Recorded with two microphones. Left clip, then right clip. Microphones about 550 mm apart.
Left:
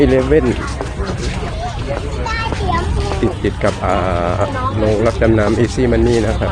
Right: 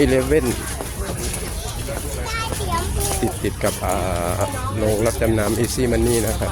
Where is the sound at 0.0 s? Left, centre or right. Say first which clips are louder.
Left 5 dB; right.